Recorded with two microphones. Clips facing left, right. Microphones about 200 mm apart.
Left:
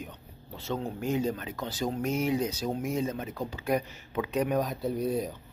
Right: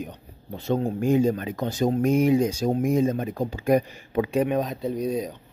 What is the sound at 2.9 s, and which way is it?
Speech, 50° right (ahead or behind).